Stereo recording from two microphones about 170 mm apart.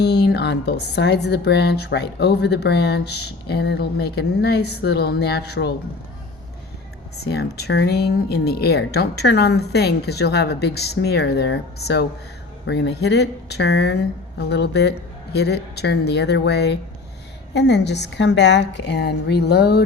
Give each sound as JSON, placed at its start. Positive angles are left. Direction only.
{"t": 0.0, "sound": "a woman's voice", "side_deg": 75}
{"t": 7.2, "sound": "a woman's voice", "side_deg": 75}
{"t": 12.6, "sound": "a woman's voice", "side_deg": 90}